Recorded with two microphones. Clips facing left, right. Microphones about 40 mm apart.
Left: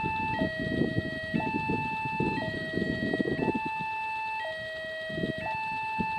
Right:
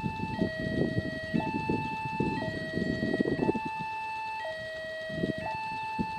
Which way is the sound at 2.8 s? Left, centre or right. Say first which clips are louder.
Even; left.